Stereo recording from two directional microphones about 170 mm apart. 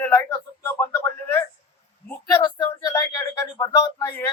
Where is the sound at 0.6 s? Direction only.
15° left (ahead or behind).